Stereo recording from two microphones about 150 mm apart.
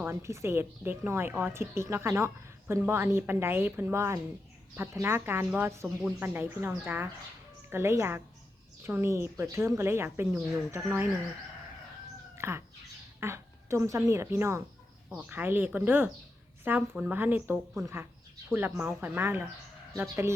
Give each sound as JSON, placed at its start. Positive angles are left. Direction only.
{"t": 0.0, "sound": "a woman's voice", "side_deg": -15}
{"t": 12.4, "sound": "bird", "side_deg": -15}
{"t": 13.1, "sound": "a woman's voice", "side_deg": -15}